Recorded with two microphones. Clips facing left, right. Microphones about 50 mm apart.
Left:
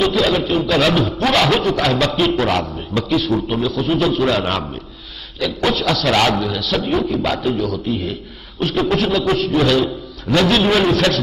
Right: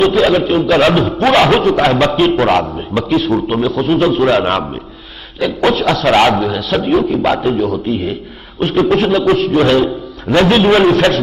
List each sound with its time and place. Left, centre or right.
0.0 s a sound: right
0.5 s a man's voice: right
3.3 s speech: centre
3.6 s a man's voice: right
5.7 s a man's voice: right
6.3 s speech: centre
8.8 s a man's voice: right